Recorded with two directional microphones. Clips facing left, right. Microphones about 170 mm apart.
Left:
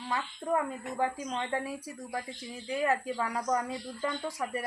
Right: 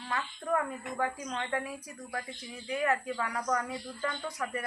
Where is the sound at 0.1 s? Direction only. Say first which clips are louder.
Left 1 dB; 20° left (ahead or behind).